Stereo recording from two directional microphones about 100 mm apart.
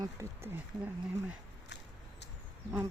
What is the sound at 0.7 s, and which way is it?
Speech, 55° right (ahead or behind).